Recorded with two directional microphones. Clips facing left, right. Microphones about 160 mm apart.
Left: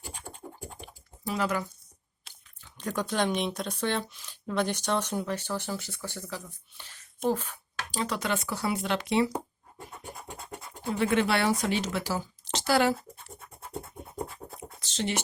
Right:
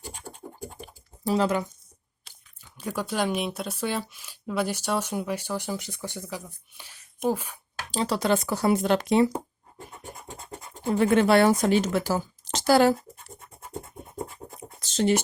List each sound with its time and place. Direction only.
0.3 s a sound: 10° right (ahead or behind)
0.8 s typing: 35° right (ahead or behind)
2.3 s chewing: centre (ahead or behind)
2.7 s speech: 5° right (ahead or behind)
7.9 s speech: 30° right (ahead or behind)
10.9 s speech: 45° right (ahead or behind)
14.8 s a sound: 45° right (ahead or behind)